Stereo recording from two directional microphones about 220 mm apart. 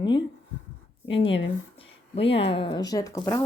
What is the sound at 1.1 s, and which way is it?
Speech, 25° left (ahead or behind).